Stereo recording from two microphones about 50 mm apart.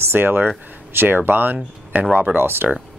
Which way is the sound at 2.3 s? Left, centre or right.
Right.